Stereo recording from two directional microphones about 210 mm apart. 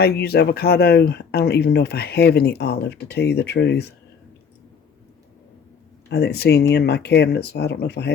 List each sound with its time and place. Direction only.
0.0 s speech: 50° left (ahead or behind)
6.1 s speech: 50° left (ahead or behind)